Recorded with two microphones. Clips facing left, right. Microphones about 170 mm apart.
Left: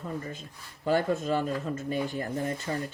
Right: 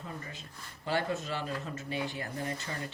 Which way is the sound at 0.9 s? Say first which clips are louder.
Left 7 dB; 50° left (ahead or behind).